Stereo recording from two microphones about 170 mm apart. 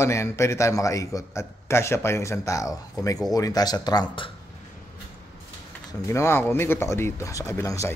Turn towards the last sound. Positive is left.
turn(degrees=15)  # may be behind; listen again after turning